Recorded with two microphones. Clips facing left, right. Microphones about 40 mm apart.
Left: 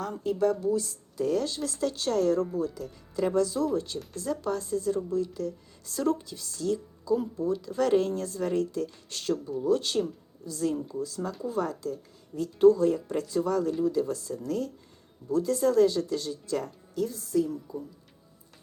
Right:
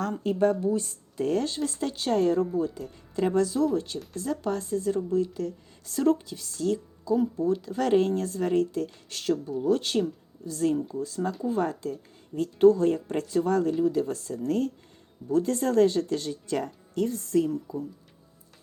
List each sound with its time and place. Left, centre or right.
0.0 s speech: right
0.6 s speech: right
1.5 s speech: centre
9.0 s speech: centre
9.3 s speech: right
13.2 s speech: right